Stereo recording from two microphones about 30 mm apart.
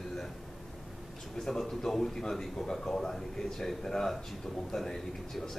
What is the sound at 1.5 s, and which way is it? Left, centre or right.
Speech, centre.